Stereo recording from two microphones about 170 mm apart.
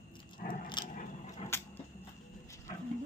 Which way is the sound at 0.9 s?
45° left (ahead or behind).